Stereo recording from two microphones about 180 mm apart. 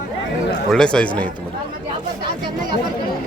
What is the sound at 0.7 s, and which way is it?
Speech, 5° left (ahead or behind).